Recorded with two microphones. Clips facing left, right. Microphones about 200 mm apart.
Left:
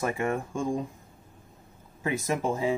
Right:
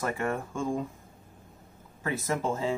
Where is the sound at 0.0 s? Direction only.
15° left (ahead or behind).